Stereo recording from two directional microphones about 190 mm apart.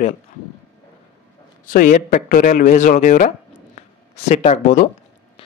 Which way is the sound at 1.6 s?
45° left (ahead or behind).